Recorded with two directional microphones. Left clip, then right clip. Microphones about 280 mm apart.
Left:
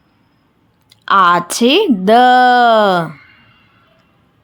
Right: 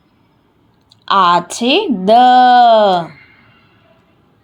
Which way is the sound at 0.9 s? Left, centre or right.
Left.